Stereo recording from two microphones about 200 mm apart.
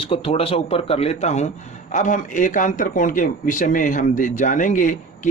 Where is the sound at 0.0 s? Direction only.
30° left (ahead or behind).